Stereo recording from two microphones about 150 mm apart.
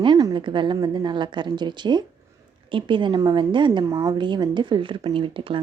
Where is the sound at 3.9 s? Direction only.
20° right (ahead or behind).